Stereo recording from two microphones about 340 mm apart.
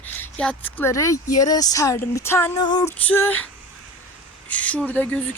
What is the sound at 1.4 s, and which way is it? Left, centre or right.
Female singing, centre.